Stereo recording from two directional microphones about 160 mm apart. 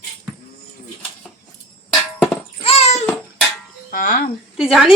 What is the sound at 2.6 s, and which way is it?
Babbling, 40° left (ahead or behind).